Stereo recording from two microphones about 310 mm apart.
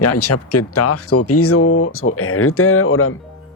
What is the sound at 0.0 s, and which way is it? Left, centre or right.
Speech, left.